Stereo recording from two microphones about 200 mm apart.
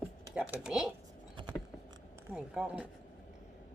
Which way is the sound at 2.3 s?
5° right (ahead or behind).